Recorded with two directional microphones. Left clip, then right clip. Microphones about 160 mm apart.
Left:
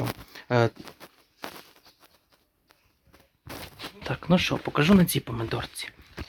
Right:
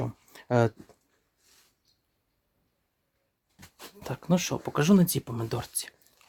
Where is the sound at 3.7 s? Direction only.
10° right (ahead or behind); by 6.0 s 35° right (ahead or behind).